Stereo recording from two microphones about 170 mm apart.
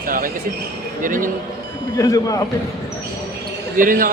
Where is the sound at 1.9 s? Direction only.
20° left (ahead or behind).